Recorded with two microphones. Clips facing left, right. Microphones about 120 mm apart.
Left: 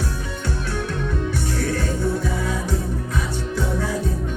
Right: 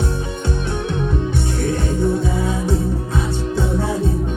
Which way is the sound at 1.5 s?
25° right (ahead or behind).